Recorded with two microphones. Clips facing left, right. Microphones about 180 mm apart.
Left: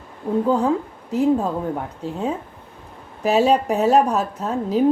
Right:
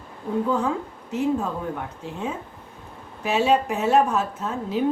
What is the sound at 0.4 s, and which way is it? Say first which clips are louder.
Speech: left 6 dB; 35° left (ahead or behind).